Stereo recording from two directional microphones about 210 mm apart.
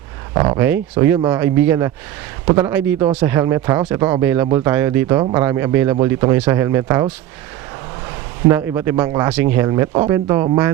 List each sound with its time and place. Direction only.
0.3 s speech: 25° right (ahead or behind)
0.6 s speech: 10° right (ahead or behind)
8.4 s speech: 10° right (ahead or behind)